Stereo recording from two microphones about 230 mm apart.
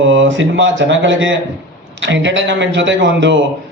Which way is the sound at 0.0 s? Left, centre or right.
Right.